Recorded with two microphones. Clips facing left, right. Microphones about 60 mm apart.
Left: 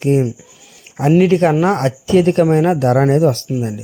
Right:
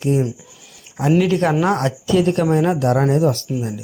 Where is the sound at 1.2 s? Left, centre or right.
Left.